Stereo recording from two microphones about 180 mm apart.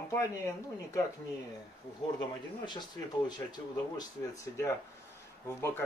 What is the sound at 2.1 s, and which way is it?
Speech, 25° left (ahead or behind).